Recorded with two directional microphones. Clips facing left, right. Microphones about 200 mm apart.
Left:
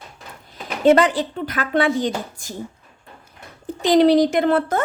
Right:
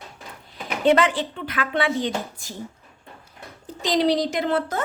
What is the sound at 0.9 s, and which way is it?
A woman's voice, 40° left (ahead or behind).